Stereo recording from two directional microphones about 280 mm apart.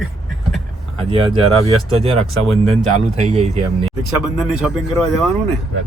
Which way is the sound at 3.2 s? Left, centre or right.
Right.